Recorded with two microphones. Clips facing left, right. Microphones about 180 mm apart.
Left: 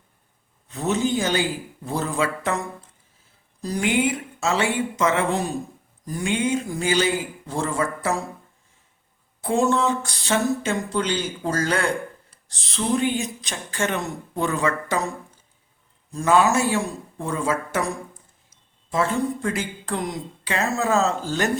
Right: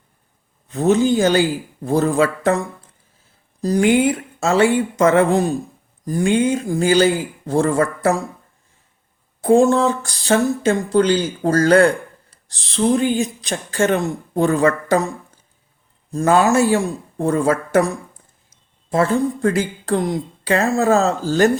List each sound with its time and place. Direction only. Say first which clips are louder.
0.8 s a woman's voice: right 8 dB; 35° right (ahead or behind)
3.6 s a woman's voice: right 7 dB; 40° right (ahead or behind)
9.4 s a woman's voice: right 7 dB; 35° right (ahead or behind)
16.1 s speech: right 4 dB; 40° right (ahead or behind)
18.5 s a sound: right 5 dB; 50° right (ahead or behind)
19.5 s a woman's voice: right 8 dB; 35° right (ahead or behind)